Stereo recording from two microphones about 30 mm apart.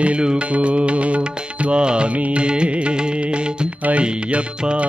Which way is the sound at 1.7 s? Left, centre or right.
Right.